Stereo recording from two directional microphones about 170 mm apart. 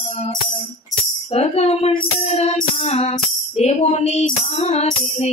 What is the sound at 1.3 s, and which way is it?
Music, 40° left (ahead or behind).